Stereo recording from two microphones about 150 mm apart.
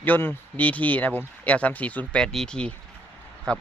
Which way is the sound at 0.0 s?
15° left (ahead or behind).